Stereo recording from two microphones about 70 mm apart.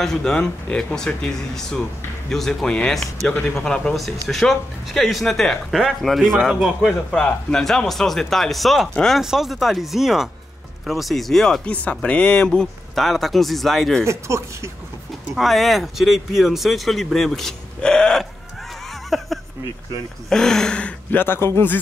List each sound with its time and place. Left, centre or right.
0.0 s speech: centre
3.9 s speech: centre
7.1 s speech: centre
11.6 s speech: centre
14.0 s speech: right
15.3 s speech: centre
19.0 s a sound: centre
20.2 s speech: centre
21.2 s speech: left